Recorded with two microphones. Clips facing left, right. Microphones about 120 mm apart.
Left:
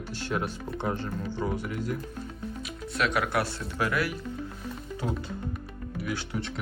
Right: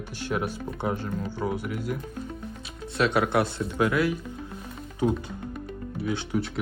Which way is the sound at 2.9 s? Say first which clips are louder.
Right 4 dB; 30° right (ahead or behind).